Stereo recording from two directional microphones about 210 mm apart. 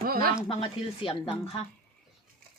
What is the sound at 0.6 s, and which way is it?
Speech, 25° left (ahead or behind).